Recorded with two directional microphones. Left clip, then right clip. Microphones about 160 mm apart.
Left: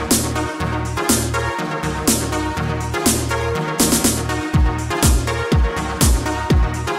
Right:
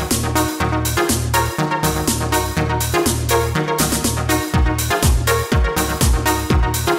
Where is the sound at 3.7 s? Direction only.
Centre (ahead or behind).